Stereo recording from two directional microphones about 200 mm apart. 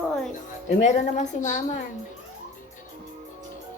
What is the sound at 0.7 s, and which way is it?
A woman's voice, 35° left (ahead or behind).